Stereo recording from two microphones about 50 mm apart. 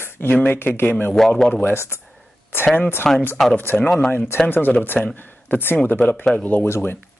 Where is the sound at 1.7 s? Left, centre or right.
Left.